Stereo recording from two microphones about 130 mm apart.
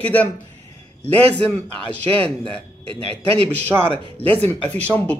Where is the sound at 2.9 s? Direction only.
45° right (ahead or behind).